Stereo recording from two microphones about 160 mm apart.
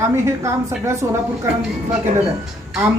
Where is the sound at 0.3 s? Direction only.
15° right (ahead or behind).